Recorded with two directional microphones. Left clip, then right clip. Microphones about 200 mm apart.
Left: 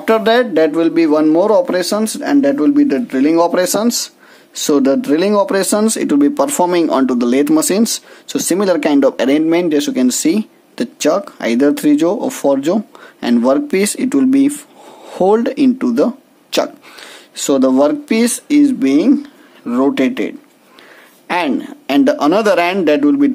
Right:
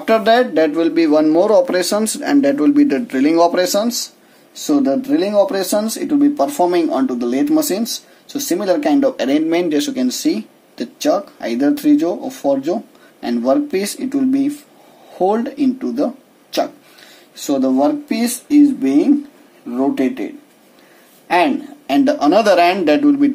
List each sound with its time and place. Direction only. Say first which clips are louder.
0.0 s speech: left 1 dB; 30° left (ahead or behind)
21.3 s speech: right 2 dB; 40° left (ahead or behind)